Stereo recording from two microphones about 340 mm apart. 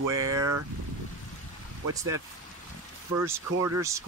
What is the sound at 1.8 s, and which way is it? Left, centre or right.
Speech, centre.